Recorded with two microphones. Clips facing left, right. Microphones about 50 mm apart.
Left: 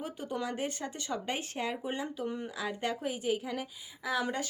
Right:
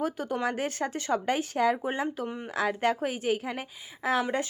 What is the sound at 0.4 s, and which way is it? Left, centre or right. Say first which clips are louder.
Speech: right 8 dB; right.